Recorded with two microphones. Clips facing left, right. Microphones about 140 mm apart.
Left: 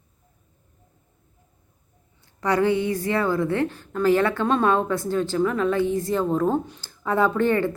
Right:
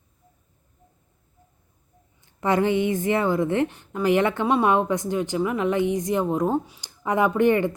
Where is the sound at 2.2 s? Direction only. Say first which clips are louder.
Even; 20° right (ahead or behind).